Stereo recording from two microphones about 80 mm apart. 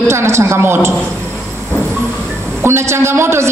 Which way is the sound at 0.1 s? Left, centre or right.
Right.